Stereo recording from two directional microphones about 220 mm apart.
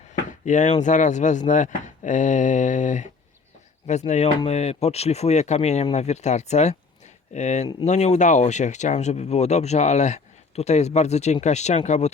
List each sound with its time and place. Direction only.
0.3 s speech: 35° left (ahead or behind)